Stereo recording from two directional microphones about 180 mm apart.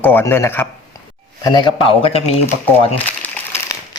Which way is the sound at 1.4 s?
25° left (ahead or behind).